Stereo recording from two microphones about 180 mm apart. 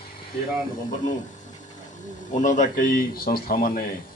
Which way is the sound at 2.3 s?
45° left (ahead or behind).